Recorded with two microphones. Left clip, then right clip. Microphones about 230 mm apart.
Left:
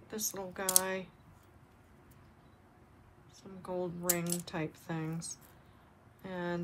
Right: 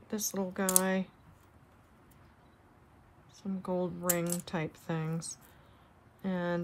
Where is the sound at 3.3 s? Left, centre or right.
Right.